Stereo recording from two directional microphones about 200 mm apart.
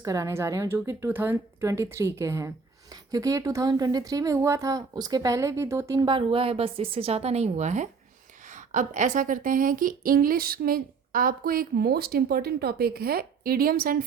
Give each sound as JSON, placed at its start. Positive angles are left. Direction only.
{"t": 0.0, "sound": "a woman's voice", "side_deg": -15}